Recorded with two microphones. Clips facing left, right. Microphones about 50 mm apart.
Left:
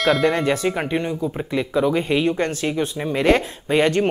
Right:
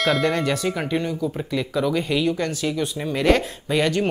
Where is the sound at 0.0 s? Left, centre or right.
Centre.